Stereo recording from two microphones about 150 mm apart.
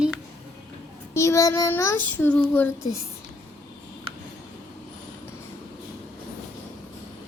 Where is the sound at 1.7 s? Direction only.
15° left (ahead or behind).